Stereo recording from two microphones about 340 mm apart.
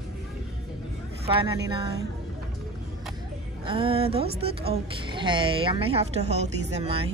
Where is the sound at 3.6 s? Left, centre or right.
Centre.